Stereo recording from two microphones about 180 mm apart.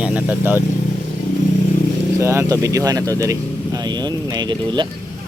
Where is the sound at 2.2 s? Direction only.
15° right (ahead or behind).